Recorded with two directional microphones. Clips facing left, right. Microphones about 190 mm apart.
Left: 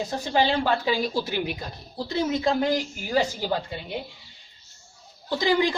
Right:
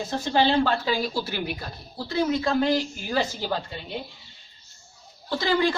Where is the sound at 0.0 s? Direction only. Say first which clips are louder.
Right 1 dB; 15° left (ahead or behind).